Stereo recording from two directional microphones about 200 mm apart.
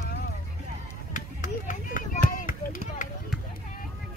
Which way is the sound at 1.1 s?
40° left (ahead or behind).